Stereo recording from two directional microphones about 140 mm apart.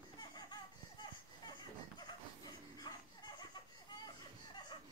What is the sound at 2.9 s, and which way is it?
Dog, 35° left (ahead or behind).